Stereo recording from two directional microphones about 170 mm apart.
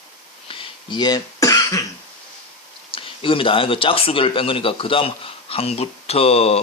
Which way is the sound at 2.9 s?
30° left (ahead or behind).